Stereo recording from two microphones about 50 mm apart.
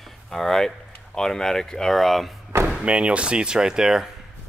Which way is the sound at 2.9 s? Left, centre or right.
Right.